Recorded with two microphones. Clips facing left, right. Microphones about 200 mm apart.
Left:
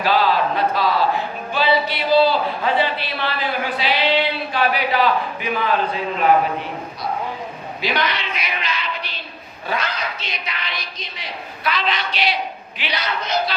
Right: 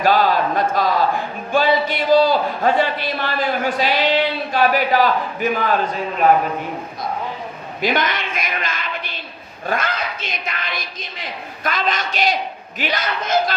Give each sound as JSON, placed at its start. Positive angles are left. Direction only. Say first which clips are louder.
{"t": 0.0, "sound": "speech", "louder": "right 2 dB", "side_deg": -45}
{"t": 4.5, "sound": "a sound", "louder": "right 4 dB", "side_deg": -45}
{"t": 7.8, "sound": "a man's voice", "louder": "right 3 dB", "side_deg": -50}